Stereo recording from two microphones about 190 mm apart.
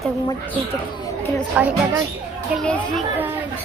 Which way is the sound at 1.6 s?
5° right (ahead or behind).